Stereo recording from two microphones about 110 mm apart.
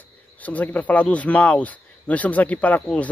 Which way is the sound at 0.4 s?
15° left (ahead or behind).